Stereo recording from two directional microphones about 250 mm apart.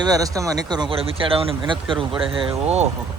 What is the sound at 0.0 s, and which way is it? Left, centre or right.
Speech, centre.